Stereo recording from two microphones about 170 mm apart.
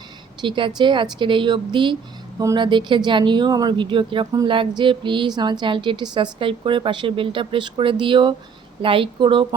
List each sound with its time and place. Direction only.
0.4 s speech: 30° right (ahead or behind)